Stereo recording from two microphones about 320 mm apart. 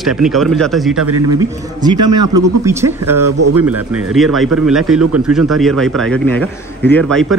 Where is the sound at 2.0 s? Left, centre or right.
Right.